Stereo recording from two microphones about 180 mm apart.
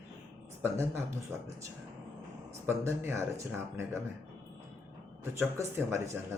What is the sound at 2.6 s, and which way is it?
Speech, 15° right (ahead or behind).